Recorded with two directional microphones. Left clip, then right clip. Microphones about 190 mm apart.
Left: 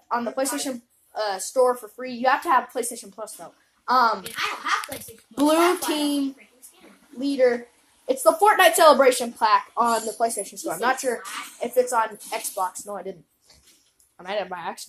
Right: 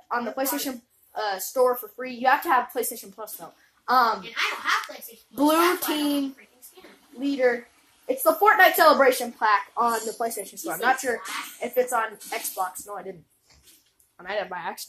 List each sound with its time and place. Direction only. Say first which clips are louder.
0.1 s a woman's voice: left 2 dB; 10° left (ahead or behind)
5.3 s a woman's voice: left 1 dB; 10° left (ahead or behind)
14.1 s a woman's voice: left 1 dB; 10° left (ahead or behind)